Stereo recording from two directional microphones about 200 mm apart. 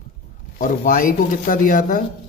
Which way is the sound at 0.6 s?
45° left (ahead or behind).